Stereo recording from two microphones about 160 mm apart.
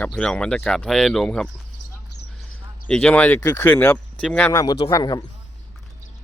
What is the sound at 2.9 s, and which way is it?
Speech, 5° left (ahead or behind).